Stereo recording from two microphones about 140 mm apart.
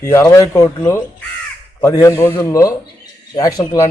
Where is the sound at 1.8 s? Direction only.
20° left (ahead or behind).